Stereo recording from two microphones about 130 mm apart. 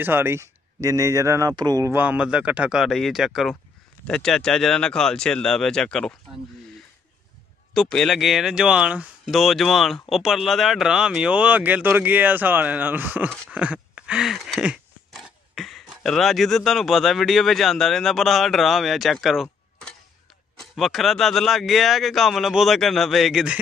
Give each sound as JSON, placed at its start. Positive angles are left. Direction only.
{"t": 0.0, "sound": "speech", "side_deg": -15}
{"t": 1.9, "sound": "speech", "side_deg": -15}
{"t": 7.7, "sound": "speech", "side_deg": 5}
{"t": 13.5, "sound": "a sound", "side_deg": -10}
{"t": 20.5, "sound": "speech", "side_deg": 0}